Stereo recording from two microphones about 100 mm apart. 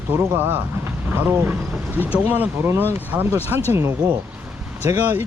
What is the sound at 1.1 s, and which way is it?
Speech, 20° right (ahead or behind).